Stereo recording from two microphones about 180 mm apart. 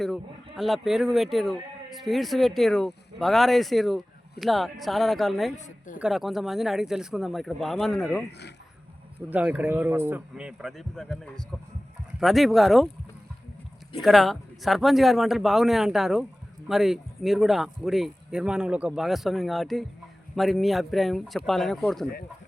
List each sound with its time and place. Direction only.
0.0 s speech: centre (ahead or behind)
5.5 s a woman's voice: 45° left (ahead or behind)
6.0 s speech: centre (ahead or behind)
9.3 s speech: 10° right (ahead or behind)
14.0 s speech: centre (ahead or behind)